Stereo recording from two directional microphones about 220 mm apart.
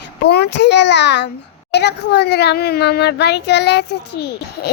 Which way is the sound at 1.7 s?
50° left (ahead or behind).